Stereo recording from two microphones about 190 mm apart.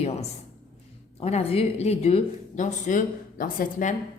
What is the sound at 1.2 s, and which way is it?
A woman's voice, 30° left (ahead or behind).